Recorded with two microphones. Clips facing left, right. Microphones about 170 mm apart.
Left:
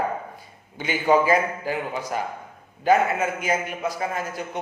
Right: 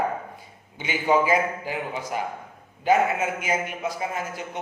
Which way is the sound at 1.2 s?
10° right (ahead or behind).